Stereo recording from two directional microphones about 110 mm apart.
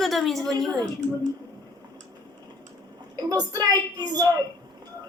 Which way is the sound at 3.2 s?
35° right (ahead or behind).